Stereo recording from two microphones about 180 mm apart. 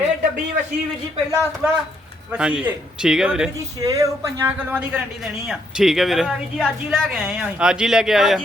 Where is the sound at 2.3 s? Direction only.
5° right (ahead or behind).